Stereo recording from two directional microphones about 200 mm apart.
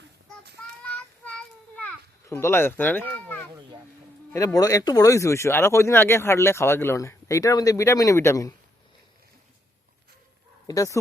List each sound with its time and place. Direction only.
0.8 s a sound: 5° left (ahead or behind)
4.3 s speech: 15° left (ahead or behind)
10.7 s speech: 15° left (ahead or behind)